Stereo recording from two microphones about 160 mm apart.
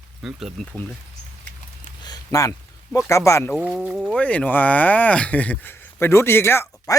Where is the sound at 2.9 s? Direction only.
20° left (ahead or behind).